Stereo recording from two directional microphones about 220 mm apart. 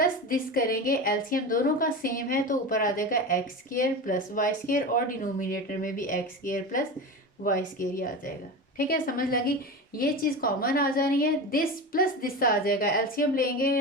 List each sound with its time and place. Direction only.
0.0 s a woman's voice: 40° left (ahead or behind)